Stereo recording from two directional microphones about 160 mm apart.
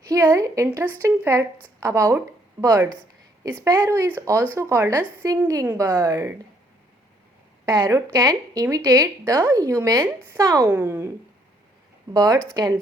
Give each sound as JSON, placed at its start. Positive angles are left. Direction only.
{"t": 0.0, "sound": "a woman's voice", "side_deg": -20}
{"t": 7.6, "sound": "speech", "side_deg": -20}
{"t": 12.1, "sound": "speech", "side_deg": -25}